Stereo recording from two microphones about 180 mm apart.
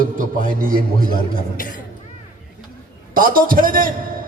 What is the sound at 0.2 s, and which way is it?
Speech, 50° right (ahead or behind).